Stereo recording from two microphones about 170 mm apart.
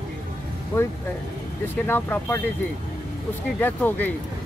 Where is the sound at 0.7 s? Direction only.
15° left (ahead or behind).